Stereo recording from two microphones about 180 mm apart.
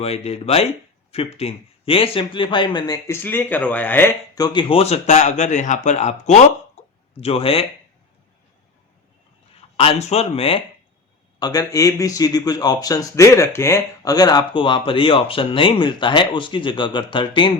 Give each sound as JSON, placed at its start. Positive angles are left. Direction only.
{"t": 0.0, "sound": "a man's voice", "side_deg": 35}
{"t": 4.4, "sound": "speech", "side_deg": 25}
{"t": 9.6, "sound": "speech", "side_deg": 30}
{"t": 11.3, "sound": "a man's voice", "side_deg": 20}